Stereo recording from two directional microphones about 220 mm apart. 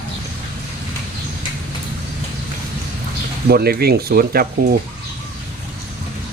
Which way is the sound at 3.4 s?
45° right (ahead or behind).